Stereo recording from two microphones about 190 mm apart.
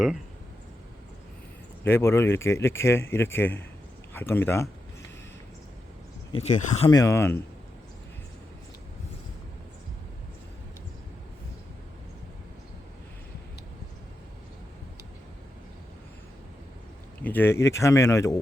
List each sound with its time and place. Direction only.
1.8 s speech: 10° left (ahead or behind)
6.4 s speech: 35° left (ahead or behind)
6.9 s speech: 15° left (ahead or behind)
17.2 s speech: 10° left (ahead or behind)